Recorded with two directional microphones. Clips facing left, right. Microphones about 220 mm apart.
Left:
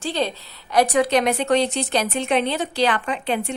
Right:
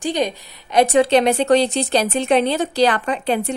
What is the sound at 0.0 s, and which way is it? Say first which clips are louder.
A woman's voice: right 3 dB; 15° right (ahead or behind).